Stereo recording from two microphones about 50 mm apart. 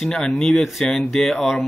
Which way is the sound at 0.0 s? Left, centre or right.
Centre.